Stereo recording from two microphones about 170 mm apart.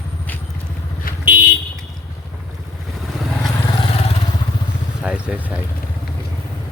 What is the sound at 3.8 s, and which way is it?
Vehicle, 35° left (ahead or behind).